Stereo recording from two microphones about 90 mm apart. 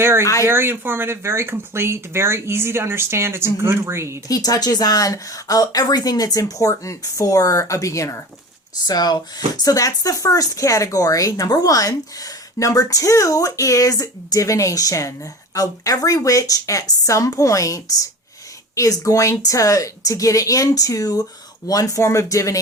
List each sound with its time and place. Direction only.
0.0 s speech: 25° right (ahead or behind)
4.3 s speech: 40° left (ahead or behind)
8.9 s speech: 50° left (ahead or behind)